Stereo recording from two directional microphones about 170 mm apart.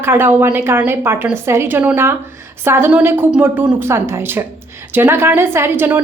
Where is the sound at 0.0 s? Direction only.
15° right (ahead or behind).